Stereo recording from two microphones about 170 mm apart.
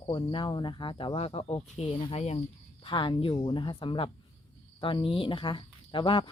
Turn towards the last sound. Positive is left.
turn(degrees=30)  # may be behind; listen again after turning